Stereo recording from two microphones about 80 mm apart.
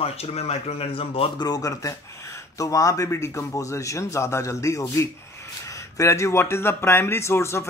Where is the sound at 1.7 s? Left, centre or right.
Left.